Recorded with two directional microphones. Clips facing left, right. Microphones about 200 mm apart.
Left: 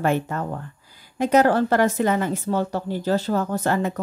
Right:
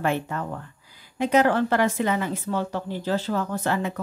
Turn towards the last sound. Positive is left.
turn(degrees=45)  # may be behind; listen again after turning